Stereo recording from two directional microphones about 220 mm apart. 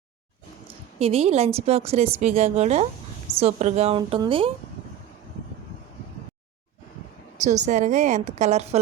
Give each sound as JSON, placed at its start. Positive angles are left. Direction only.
{"t": 0.7, "sound": "a woman's voice", "side_deg": -25}
{"t": 7.3, "sound": "a woman's voice", "side_deg": -30}